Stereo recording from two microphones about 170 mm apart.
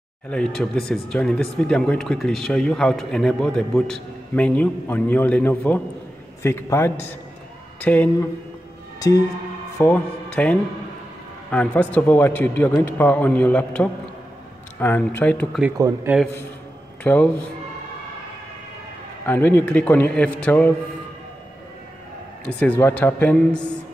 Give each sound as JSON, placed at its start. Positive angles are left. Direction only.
{"t": 0.3, "sound": "a man's voice", "side_deg": 5}
{"t": 9.8, "sound": "a man's voice", "side_deg": 10}
{"t": 17.0, "sound": "a man's voice", "side_deg": 10}
{"t": 19.2, "sound": "a man's voice", "side_deg": 10}
{"t": 22.5, "sound": "a man's voice", "side_deg": 10}